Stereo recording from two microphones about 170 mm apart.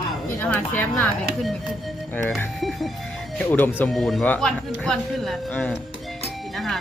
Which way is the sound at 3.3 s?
10° left (ahead or behind).